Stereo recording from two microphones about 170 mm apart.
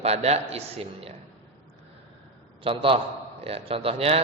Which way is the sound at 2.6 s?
30° right (ahead or behind).